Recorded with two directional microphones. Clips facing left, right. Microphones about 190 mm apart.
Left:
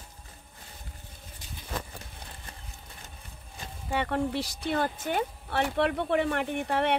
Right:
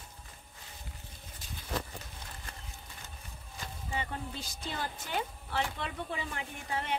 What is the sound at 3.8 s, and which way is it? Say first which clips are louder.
Speech: left 10 dB; 70° left (ahead or behind).